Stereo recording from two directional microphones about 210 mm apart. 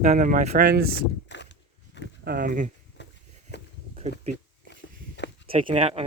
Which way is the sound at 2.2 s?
45° right (ahead or behind).